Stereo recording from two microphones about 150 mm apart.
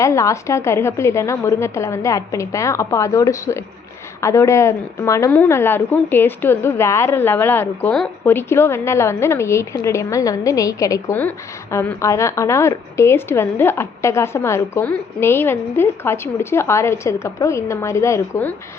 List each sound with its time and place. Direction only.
0.0 s a woman's voice: 20° left (ahead or behind)